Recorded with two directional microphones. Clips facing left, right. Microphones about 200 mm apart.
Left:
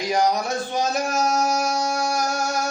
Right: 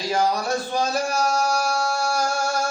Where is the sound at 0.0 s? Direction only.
20° left (ahead or behind).